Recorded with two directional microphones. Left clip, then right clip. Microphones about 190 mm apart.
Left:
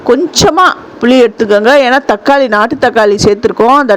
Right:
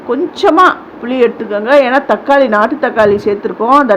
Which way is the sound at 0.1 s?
50° left (ahead or behind).